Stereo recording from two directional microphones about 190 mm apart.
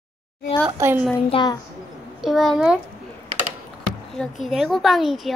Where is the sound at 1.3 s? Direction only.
20° left (ahead or behind).